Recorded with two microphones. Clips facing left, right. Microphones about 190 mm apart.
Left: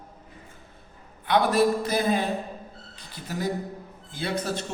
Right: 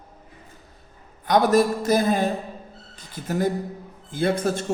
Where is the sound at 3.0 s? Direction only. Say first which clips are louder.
Right 7 dB; 50° right (ahead or behind).